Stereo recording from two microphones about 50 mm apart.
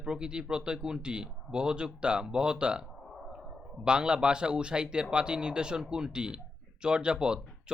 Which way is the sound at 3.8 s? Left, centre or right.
Centre.